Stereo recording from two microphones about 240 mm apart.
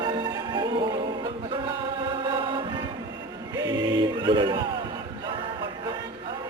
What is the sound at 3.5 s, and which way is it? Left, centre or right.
Choir, centre.